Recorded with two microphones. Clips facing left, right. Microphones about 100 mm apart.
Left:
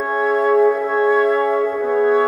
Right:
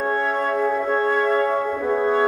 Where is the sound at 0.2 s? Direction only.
5° left (ahead or behind).